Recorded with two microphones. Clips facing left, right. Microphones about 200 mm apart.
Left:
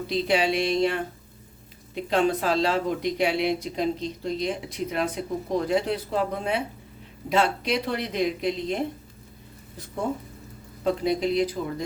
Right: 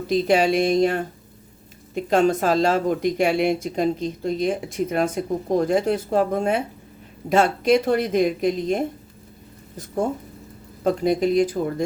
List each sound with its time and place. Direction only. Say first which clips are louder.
0.1 s speech: right 5 dB; 45° right (ahead or behind)
2.0 s speech: right 4 dB; 45° right (ahead or behind)
10.8 s speech: right 4 dB; 50° right (ahead or behind)